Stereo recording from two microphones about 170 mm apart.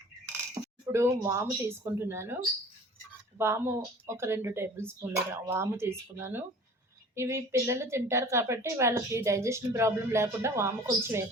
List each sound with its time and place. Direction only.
0.9 s a woman's voice: 15° right (ahead or behind)